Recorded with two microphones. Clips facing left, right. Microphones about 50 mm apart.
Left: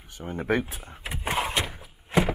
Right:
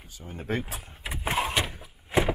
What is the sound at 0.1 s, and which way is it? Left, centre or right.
Speech, left.